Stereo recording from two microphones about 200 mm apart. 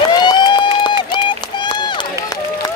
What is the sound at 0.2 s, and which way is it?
Run, 20° left (ahead or behind).